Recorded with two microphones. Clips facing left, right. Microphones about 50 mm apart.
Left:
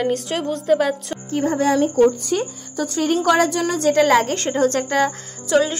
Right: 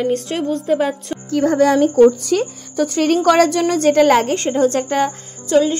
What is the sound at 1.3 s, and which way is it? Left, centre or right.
Speech, right.